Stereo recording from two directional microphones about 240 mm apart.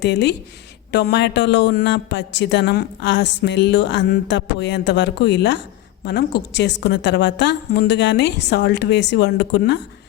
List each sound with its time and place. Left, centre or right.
0.0 s a man's voice: left